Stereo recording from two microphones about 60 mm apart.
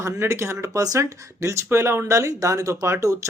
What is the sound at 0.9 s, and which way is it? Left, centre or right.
Speech, right.